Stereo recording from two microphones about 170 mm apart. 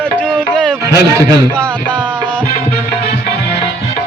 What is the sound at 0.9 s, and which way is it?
Speech, 20° right (ahead or behind).